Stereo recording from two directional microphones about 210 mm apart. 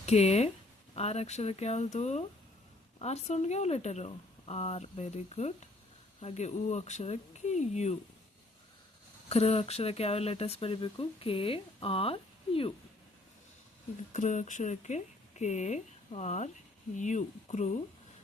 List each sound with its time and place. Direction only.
0.0 s speech: 30° left (ahead or behind)
9.3 s speech: 30° left (ahead or behind)
14.1 s speech: 35° left (ahead or behind)